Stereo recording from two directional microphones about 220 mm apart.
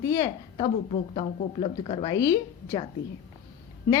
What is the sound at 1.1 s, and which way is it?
A woman's voice, 30° left (ahead or behind).